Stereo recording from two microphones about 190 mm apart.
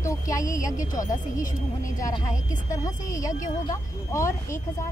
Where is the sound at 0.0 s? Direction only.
15° left (ahead or behind).